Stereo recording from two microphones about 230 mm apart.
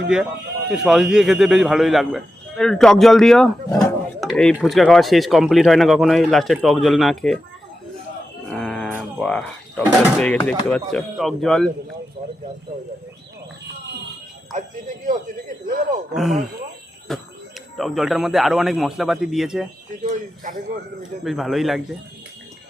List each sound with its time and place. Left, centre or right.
0.1 s speech: centre
3.7 s speech: centre
4.2 s speech: centre
8.4 s speech: centre
14.5 s speech: right
16.1 s speech: centre
21.2 s speech: centre